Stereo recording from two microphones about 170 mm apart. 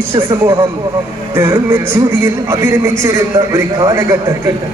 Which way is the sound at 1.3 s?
15° right (ahead or behind).